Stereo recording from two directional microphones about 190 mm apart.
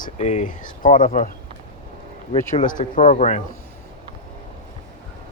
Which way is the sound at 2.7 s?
45° left (ahead or behind).